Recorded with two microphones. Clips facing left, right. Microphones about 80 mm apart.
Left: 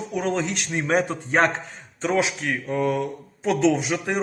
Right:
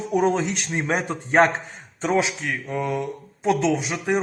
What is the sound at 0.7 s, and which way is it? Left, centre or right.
Speech, right.